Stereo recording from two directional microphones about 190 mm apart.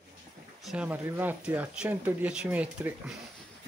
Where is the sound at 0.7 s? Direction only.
10° right (ahead or behind).